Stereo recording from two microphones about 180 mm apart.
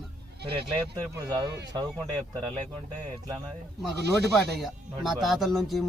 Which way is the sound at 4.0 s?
65° right (ahead or behind).